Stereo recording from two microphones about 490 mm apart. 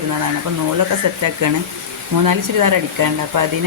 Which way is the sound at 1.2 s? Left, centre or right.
Right.